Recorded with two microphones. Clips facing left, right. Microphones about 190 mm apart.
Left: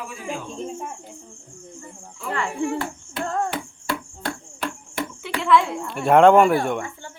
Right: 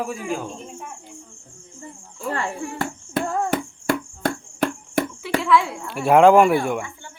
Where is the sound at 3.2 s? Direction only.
10° right (ahead or behind).